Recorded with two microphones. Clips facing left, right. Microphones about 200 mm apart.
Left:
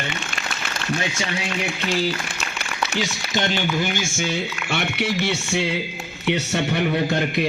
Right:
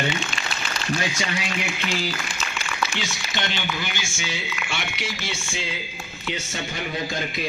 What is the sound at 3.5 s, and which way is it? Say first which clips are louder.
Speech: left 7 dB; 45° left (ahead or behind).